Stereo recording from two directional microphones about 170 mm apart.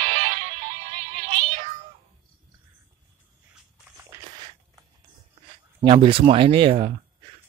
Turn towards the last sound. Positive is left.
turn(degrees=-30)  # may be behind; listen again after turning